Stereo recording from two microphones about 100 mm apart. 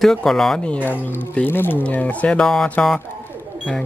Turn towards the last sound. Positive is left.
turn(degrees=10)  # may be behind; listen again after turning